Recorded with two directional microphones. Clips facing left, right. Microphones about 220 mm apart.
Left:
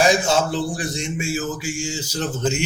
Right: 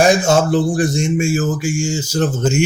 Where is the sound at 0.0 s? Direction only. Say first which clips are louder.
Right 5 dB; 50° right (ahead or behind).